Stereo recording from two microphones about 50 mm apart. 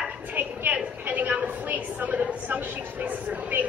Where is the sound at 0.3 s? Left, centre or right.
Right.